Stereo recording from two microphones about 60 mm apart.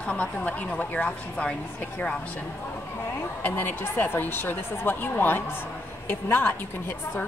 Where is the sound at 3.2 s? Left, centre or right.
Left.